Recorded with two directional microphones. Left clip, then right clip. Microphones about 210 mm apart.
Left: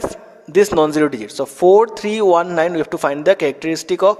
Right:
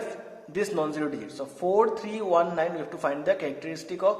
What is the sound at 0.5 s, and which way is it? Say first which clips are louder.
A man's voice: left 15 dB; 50° left (ahead or behind).